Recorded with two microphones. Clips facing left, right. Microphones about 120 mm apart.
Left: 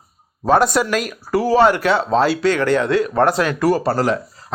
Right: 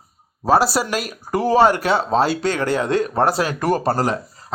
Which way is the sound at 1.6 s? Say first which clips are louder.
Left 1 dB; 40° right (ahead or behind).